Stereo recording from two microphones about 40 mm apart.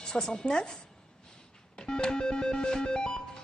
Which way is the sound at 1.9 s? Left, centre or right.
Left.